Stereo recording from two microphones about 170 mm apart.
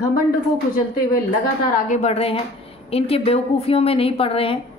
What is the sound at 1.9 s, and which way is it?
A woman's voice, 40° left (ahead or behind).